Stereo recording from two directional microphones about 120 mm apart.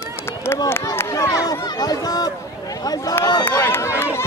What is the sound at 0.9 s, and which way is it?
Speech, 25° left (ahead or behind).